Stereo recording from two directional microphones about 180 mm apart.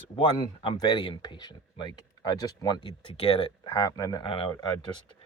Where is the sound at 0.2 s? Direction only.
25° left (ahead or behind).